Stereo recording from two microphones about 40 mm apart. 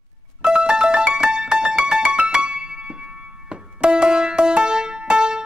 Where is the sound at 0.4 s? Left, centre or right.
Right.